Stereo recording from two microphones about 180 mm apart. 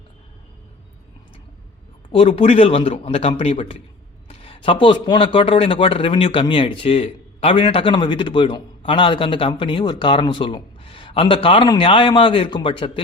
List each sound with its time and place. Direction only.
2.1 s a man's voice: 30° left (ahead or behind)